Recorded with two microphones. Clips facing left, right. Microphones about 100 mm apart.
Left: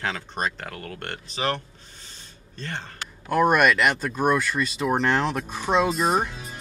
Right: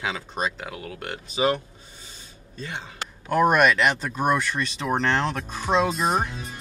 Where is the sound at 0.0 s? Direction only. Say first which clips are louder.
Even; 5° right (ahead or behind).